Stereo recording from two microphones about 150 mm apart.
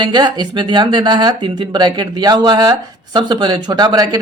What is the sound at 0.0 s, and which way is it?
Speech, 30° right (ahead or behind).